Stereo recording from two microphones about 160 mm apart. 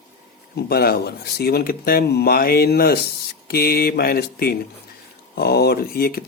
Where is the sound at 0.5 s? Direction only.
75° left (ahead or behind).